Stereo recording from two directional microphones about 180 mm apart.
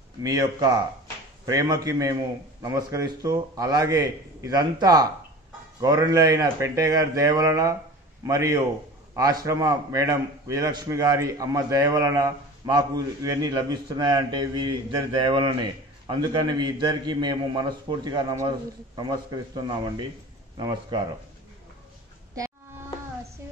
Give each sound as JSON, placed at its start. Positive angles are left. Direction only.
{"t": 0.2, "sound": "a man's voice", "side_deg": -20}